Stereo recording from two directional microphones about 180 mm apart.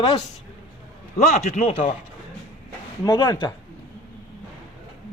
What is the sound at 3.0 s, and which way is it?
Speech, 20° left (ahead or behind).